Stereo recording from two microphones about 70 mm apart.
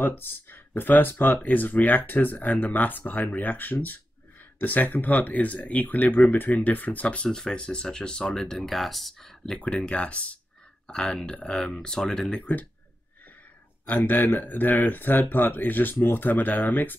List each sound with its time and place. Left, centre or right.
0.0 s speech: left; by 9.6 s centre
9.6 s speech: centre
12.4 s speech: left
13.8 s speech: left